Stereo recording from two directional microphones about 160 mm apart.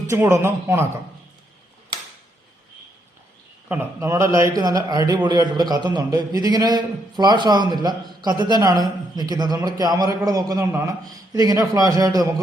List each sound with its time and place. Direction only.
0.1 s a man's voice: 15° right (ahead or behind)
3.7 s a man's voice: 20° right (ahead or behind)